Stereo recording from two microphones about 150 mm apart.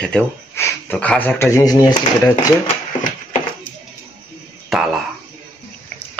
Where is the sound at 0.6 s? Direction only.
15° left (ahead or behind).